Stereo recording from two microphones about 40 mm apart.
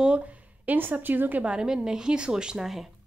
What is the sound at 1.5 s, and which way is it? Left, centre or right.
Speech, centre.